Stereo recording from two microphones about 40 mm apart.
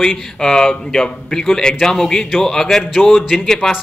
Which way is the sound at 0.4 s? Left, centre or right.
Centre.